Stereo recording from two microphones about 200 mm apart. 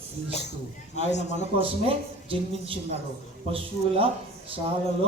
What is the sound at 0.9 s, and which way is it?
Speech, 35° left (ahead or behind).